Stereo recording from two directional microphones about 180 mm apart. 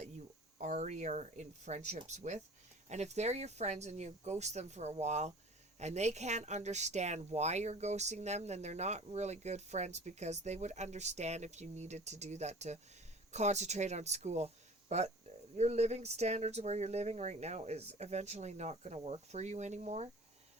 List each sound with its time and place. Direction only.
0.6 s speech: 40° right (ahead or behind)